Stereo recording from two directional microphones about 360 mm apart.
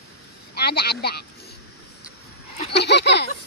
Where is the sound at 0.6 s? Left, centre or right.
Left.